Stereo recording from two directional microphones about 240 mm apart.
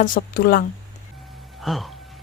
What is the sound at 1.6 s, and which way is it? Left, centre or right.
Speech, centre.